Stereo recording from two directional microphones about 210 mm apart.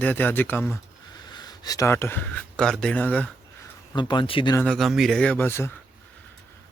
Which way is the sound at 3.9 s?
20° left (ahead or behind).